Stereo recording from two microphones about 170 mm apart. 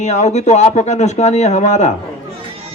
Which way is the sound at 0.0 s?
40° left (ahead or behind).